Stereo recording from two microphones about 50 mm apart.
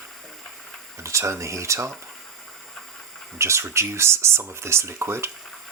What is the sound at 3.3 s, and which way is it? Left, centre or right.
Speech, right.